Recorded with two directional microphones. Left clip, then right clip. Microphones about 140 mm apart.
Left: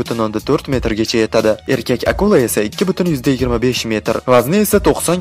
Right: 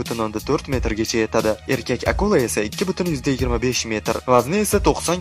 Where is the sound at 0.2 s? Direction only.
30° left (ahead or behind).